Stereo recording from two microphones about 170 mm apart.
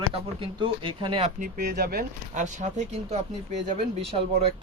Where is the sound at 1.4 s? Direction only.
70° right (ahead or behind).